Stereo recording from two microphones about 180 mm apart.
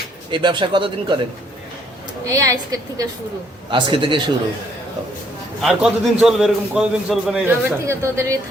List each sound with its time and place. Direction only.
0.3 s a man's voice: 25° right (ahead or behind)
2.2 s a woman's voice: 15° right (ahead or behind)
5.6 s a man's voice: 5° right (ahead or behind)